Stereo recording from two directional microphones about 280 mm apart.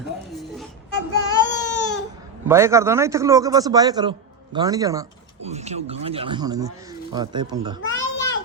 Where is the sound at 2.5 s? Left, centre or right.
Centre.